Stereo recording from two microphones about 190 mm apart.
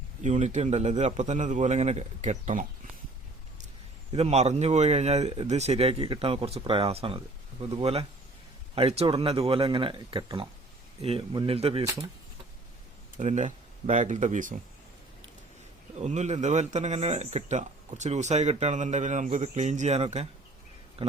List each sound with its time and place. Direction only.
0.2 s speech: 35° right (ahead or behind)
4.1 s speech: 35° right (ahead or behind)
13.1 s speech: 40° right (ahead or behind)
16.0 s speech: 35° right (ahead or behind)